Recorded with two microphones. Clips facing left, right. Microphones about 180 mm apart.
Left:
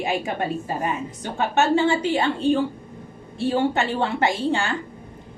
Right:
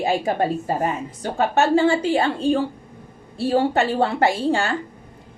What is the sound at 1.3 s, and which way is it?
Speech, 35° right (ahead or behind).